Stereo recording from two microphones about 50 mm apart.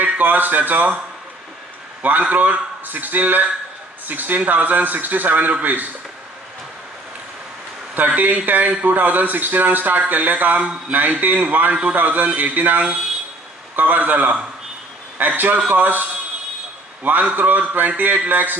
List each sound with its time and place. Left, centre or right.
0.0 s speech: right
2.0 s speech: right
7.9 s speech: right